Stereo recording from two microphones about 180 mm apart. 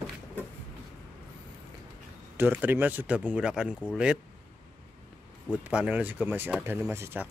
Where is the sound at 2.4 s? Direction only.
10° right (ahead or behind).